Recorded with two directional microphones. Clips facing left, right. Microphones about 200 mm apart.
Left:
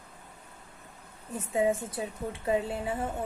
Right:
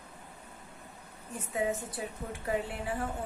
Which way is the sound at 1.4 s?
25° left (ahead or behind).